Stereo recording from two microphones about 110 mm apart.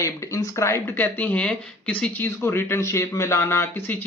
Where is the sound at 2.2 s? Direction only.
25° left (ahead or behind).